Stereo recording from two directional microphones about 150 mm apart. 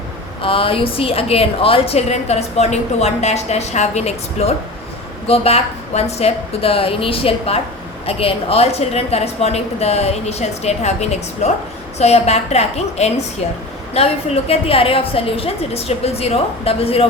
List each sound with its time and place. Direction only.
0.4 s a woman's voice: 35° left (ahead or behind)